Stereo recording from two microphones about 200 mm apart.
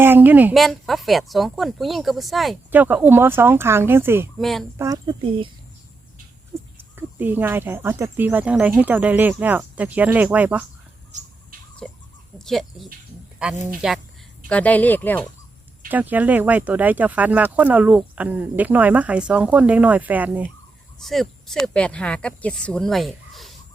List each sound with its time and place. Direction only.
0.0 s speech: 10° right (ahead or behind)
4.4 s speech: centre (ahead or behind)
4.8 s speech: 20° right (ahead or behind)
6.7 s speech: 10° right (ahead or behind)
11.1 s bird: 35° right (ahead or behind)
11.8 s chicken: centre (ahead or behind)
12.4 s speech: centre (ahead or behind)
15.9 s speech: 10° right (ahead or behind)